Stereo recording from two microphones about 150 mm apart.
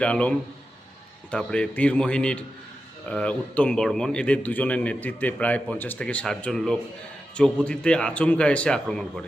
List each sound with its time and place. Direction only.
0.0 s a man's voice: 10° left (ahead or behind)